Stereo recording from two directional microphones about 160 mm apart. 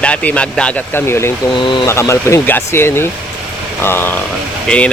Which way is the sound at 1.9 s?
15° left (ahead or behind).